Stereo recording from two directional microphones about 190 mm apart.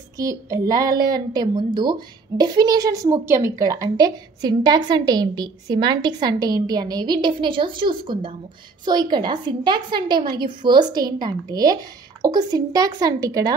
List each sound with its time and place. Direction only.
0.2 s a woman's voice: 15° right (ahead or behind)